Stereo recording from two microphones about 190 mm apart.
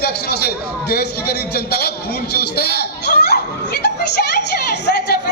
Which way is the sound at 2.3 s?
55° left (ahead or behind).